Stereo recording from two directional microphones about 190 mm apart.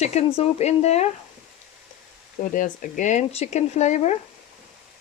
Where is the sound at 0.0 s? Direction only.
35° left (ahead or behind).